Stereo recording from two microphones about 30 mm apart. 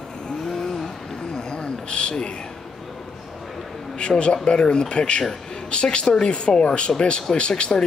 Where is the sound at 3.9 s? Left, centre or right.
Left.